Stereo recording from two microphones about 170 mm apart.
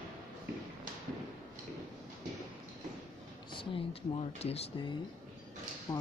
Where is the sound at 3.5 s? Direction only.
30° left (ahead or behind).